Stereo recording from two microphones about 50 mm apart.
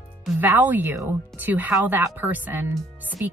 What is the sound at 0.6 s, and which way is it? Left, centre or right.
Speech, right.